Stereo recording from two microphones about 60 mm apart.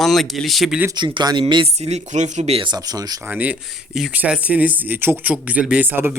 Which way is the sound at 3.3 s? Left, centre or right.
Right.